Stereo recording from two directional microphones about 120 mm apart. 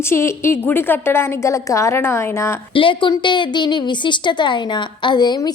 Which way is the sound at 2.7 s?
45° left (ahead or behind).